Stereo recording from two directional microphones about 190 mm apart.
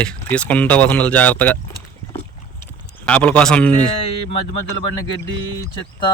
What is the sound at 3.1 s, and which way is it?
Speech, 5° left (ahead or behind).